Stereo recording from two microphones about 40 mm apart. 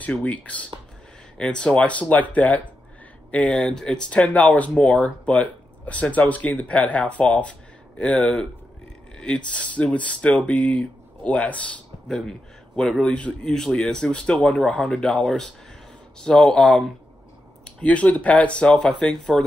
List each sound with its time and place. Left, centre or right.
0.0 s speech: left
1.4 s speech: left
1.9 s speech: left
3.5 s speech: centre
4.1 s speech: left
12.2 s a man's voice: centre
13.0 s speech: left
15.2 s speech: centre
17.6 s speech: left
18.7 s speech: left